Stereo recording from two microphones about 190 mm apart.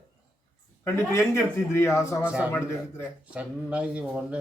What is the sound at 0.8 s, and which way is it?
Speech, 15° left (ahead or behind).